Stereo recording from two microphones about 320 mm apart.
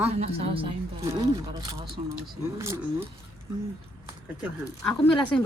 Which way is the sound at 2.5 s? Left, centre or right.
Centre.